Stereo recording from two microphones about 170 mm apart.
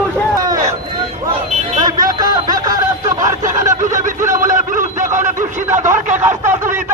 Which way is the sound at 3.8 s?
50° right (ahead or behind).